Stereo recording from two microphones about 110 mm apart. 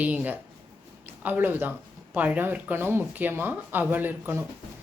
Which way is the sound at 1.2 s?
15° right (ahead or behind).